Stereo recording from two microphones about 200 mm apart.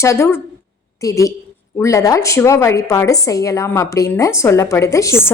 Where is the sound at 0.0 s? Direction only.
15° left (ahead or behind).